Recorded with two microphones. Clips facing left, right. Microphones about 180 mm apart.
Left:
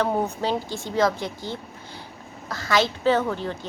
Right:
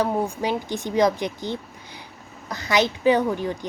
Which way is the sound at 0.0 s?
15° right (ahead or behind).